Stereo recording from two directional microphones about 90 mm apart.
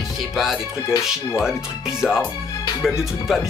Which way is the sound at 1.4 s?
5° right (ahead or behind).